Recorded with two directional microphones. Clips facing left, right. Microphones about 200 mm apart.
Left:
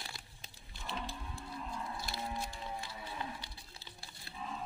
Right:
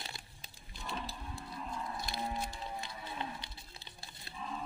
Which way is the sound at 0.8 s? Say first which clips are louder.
Even; 35° right (ahead or behind).